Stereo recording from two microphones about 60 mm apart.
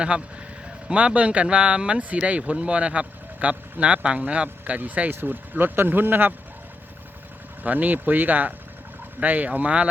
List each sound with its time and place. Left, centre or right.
0.9 s speech: right
7.6 s speech: right